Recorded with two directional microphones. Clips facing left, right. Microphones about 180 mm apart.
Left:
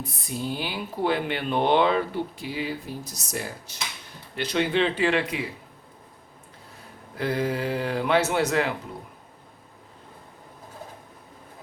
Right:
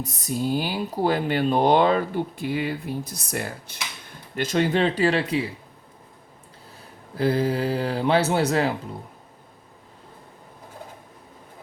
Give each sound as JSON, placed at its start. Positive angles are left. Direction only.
{"t": 0.0, "sound": "speech", "side_deg": -40}
{"t": 4.4, "sound": "speech", "side_deg": -45}
{"t": 7.2, "sound": "speech", "side_deg": -30}